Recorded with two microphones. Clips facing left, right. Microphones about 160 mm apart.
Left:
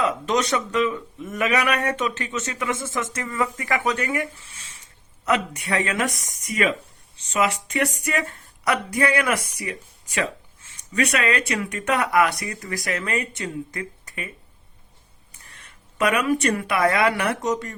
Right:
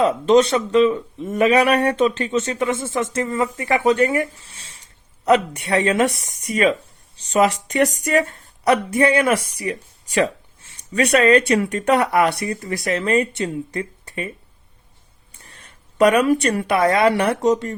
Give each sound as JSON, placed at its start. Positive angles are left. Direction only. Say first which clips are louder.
{"t": 0.0, "sound": "speech", "louder": "right 8 dB", "side_deg": -30}
{"t": 15.4, "sound": "speech", "louder": "right 2 dB", "side_deg": -30}